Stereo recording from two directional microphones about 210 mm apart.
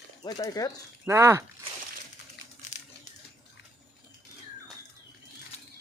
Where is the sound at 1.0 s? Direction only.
10° right (ahead or behind).